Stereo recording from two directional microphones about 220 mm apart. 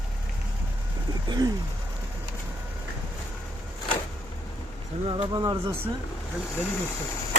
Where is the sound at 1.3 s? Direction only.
15° right (ahead or behind).